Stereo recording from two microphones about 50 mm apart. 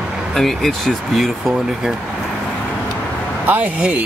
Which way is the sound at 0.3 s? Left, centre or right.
Centre.